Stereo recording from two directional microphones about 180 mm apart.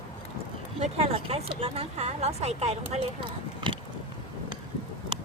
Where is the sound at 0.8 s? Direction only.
35° right (ahead or behind).